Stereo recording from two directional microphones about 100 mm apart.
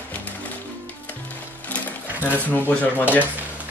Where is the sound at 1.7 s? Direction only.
15° left (ahead or behind).